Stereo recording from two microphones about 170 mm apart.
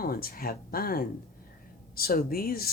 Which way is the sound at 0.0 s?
60° left (ahead or behind).